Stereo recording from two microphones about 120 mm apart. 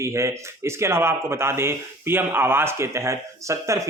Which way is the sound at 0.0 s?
25° right (ahead or behind).